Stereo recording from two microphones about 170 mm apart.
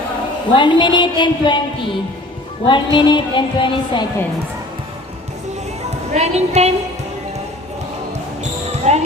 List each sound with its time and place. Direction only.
0.5 s speech: 25° left (ahead or behind)
2.6 s speech: 30° left (ahead or behind)
6.1 s a woman's voice: 40° right (ahead or behind)
8.9 s a woman's voice: 40° right (ahead or behind)